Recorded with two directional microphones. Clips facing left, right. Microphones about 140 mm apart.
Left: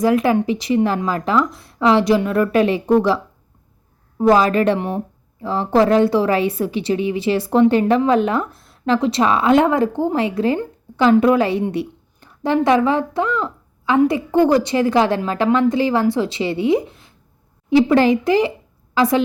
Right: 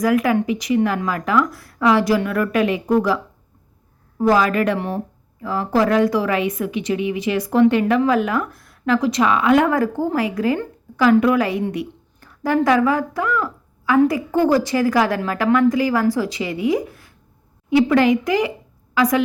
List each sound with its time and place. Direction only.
0.0 s a woman's voice: 25° left (ahead or behind)
4.2 s a woman's voice: 25° left (ahead or behind)